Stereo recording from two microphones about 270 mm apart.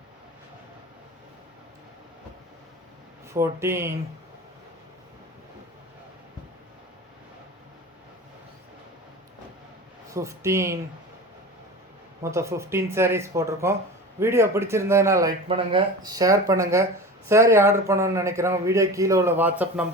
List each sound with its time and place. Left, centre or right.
3.3 s speech: centre
10.1 s speech: centre
12.2 s speech: centre